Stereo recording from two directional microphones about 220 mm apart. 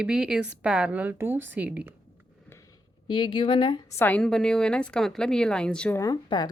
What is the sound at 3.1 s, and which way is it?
Speech, 20° left (ahead or behind).